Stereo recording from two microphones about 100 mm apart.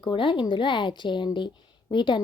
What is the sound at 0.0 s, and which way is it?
Speech, 55° left (ahead or behind).